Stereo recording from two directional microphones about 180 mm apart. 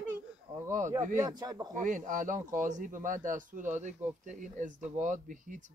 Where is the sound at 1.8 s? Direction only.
45° right (ahead or behind).